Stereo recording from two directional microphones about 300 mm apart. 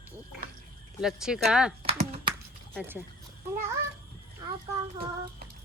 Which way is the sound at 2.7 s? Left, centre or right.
Centre.